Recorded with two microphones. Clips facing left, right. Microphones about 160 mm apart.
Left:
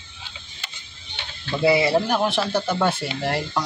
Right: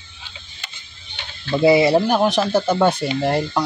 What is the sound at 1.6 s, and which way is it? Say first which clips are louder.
Speech: right 5 dB; 20° right (ahead or behind).